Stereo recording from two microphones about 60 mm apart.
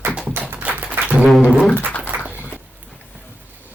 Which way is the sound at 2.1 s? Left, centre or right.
Right.